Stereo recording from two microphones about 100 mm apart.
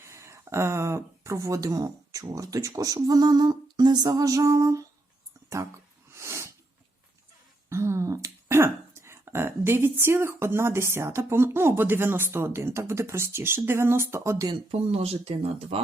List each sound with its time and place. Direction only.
0.0 s speech: 30° right (ahead or behind)
6.1 s a sound: 25° right (ahead or behind)
7.7 s speech: 30° right (ahead or behind)
14.7 s speech: 75° right (ahead or behind)